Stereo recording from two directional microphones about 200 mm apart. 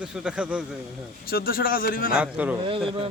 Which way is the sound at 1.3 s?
45° left (ahead or behind).